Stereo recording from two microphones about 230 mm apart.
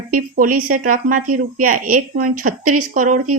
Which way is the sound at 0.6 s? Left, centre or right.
Right.